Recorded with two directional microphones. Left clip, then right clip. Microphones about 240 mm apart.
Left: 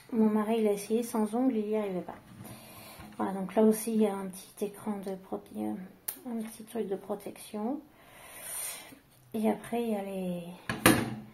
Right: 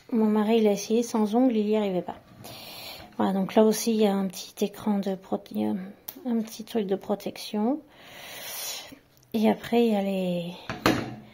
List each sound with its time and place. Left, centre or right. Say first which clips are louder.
0.1 s a woman's voice: right 5 dB; right
3.2 s speech: right 6 dB; right
8.2 s a sound: right 7 dB; right
9.3 s speech: right 7 dB; right